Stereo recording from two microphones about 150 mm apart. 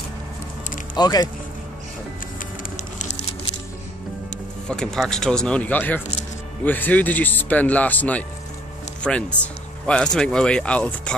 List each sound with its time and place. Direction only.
0.9 s speech: 25° left (ahead or behind)
4.6 s speech: 5° left (ahead or behind)